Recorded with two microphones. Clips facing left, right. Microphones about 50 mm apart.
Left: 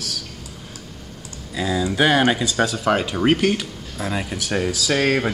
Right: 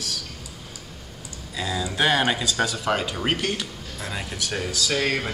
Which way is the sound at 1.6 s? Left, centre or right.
Centre.